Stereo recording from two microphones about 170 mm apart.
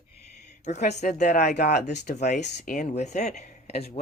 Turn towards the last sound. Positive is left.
turn(degrees=40)  # may be behind; listen again after turning